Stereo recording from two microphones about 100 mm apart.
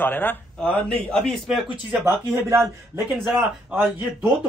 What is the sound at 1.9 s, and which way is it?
Speech, 25° right (ahead or behind).